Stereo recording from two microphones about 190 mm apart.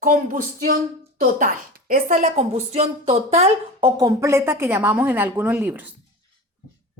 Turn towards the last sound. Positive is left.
turn(degrees=-10)  # may be behind; listen again after turning